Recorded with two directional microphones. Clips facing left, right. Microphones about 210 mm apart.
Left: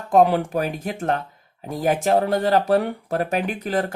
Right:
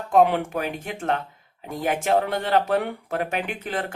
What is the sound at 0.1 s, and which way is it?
Speech, 40° left (ahead or behind).